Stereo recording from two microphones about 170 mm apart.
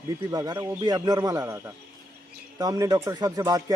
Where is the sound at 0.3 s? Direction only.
25° right (ahead or behind).